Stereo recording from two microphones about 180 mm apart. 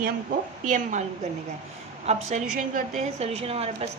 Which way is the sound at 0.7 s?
45° right (ahead or behind).